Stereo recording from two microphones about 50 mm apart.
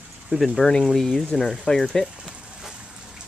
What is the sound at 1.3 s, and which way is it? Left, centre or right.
Speech, centre.